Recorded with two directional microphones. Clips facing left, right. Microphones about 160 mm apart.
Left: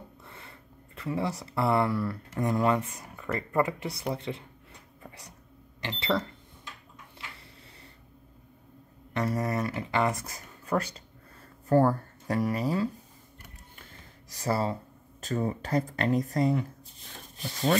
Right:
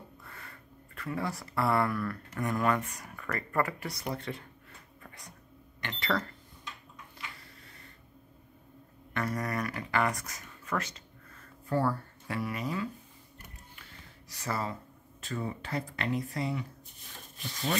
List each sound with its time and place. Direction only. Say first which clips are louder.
0.2 s a sound: left 1 dB; 25° left (ahead or behind)
1.4 s speech: left 2 dB; 25° left (ahead or behind)
5.8 s speech: left 3 dB; 30° left (ahead or behind)
7.2 s a sound: even; 25° left (ahead or behind)
9.1 s speech: left 4 dB; 25° left (ahead or behind)
11.7 s speech: left 7 dB; 45° left (ahead or behind)
14.3 s speech: left 6 dB; 35° left (ahead or behind)